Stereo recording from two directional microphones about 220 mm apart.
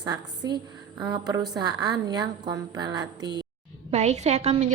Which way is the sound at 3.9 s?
30° right (ahead or behind).